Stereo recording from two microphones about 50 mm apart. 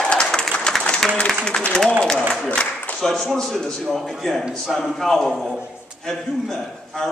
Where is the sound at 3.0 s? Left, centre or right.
Centre.